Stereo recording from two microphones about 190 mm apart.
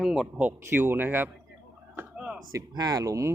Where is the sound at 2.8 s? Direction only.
20° right (ahead or behind).